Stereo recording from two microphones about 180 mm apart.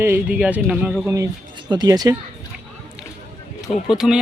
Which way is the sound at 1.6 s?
20° right (ahead or behind).